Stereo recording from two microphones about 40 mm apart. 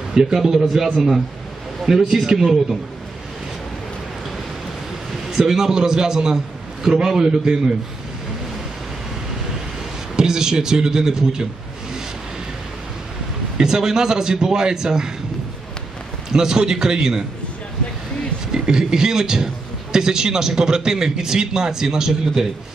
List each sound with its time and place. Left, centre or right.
0.1 s a man's voice: centre
5.3 s a man's voice: centre
10.1 s a man's voice: centre
13.6 s a man's voice: centre
16.3 s a man's voice: centre
18.5 s a man's voice: centre